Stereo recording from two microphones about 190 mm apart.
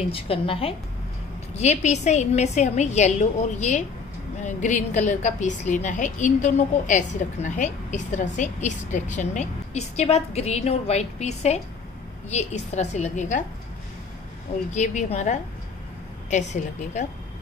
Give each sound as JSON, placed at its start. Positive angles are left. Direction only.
{"t": 0.1, "sound": "a woman's voice", "side_deg": 30}
{"t": 14.7, "sound": "a woman's voice", "side_deg": 40}